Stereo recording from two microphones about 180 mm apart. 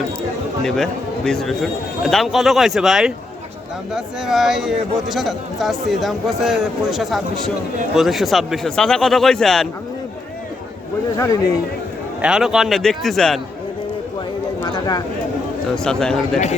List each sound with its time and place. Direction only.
0.6 s speech: 5° left (ahead or behind)
11.2 s speech: 20° left (ahead or behind)
12.2 s speech: 5° right (ahead or behind)
14.6 s speech: 20° left (ahead or behind)
15.7 s speech: 5° left (ahead or behind)